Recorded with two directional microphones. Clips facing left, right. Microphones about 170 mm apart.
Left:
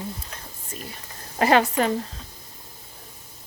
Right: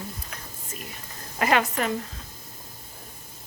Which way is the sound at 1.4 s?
30° left (ahead or behind).